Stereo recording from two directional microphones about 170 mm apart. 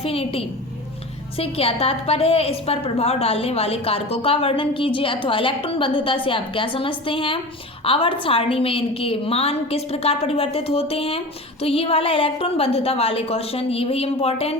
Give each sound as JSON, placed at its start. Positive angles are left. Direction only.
{"t": 0.0, "sound": "a woman's voice", "side_deg": 35}